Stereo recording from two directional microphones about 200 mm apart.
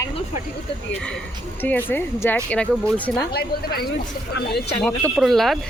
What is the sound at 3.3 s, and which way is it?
Speech, 50° left (ahead or behind).